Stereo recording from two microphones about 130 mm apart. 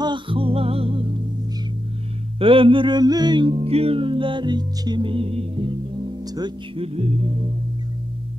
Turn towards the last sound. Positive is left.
turn(degrees=-40)  # may be behind; listen again after turning